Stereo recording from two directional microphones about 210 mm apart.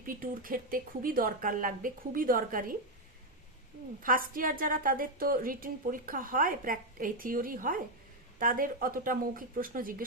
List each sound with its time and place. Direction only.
0.0 s a woman's voice: 40° right (ahead or behind)
4.0 s a woman's voice: 40° right (ahead or behind)